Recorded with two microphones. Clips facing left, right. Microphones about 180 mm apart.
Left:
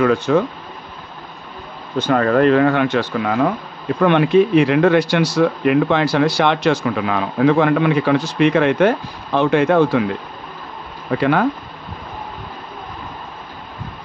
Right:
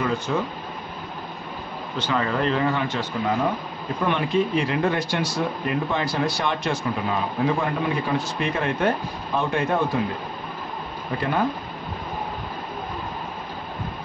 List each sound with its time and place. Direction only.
0.0 s speech: 75° left (ahead or behind)
2.0 s speech: 50° left (ahead or behind); by 3.4 s 90° left
4.0 s speech: 70° left (ahead or behind); by 10.0 s 90° left
11.1 s speech: 90° left